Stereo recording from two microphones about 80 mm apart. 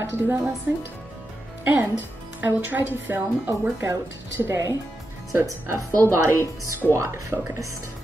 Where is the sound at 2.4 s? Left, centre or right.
Right.